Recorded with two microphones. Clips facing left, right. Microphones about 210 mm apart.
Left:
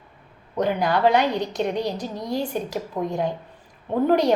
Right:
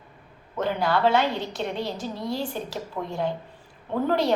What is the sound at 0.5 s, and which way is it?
A woman's voice, 15° left (ahead or behind).